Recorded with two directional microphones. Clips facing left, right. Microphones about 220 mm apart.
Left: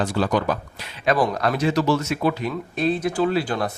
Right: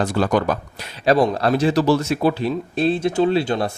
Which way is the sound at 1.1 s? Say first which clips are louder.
Right 5 dB; 25° right (ahead or behind).